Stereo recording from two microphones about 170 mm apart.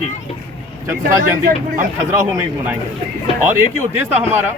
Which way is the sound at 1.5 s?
50° right (ahead or behind).